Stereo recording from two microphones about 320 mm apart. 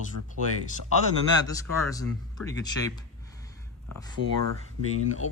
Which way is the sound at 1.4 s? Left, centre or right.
Centre.